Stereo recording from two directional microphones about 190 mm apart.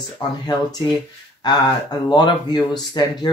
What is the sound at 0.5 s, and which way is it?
Speech, 20° left (ahead or behind).